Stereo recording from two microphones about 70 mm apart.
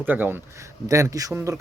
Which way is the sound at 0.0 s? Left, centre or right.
Right.